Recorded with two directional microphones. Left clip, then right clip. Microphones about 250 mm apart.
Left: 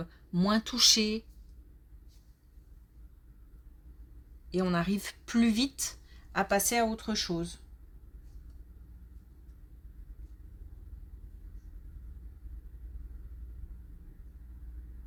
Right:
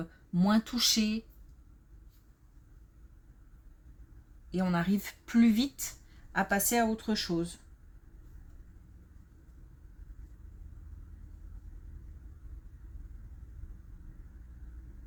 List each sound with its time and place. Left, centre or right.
0.0 s speech: left
4.5 s speech: left